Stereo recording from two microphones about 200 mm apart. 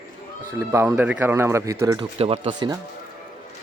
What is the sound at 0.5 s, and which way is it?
Speech, 15° right (ahead or behind).